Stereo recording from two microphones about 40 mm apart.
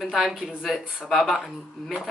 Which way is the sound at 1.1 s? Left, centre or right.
Centre.